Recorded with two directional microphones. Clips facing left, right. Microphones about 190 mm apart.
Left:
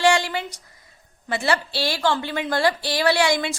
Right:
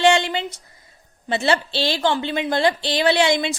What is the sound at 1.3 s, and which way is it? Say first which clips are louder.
Speech: right 3 dB; 25° right (ahead or behind).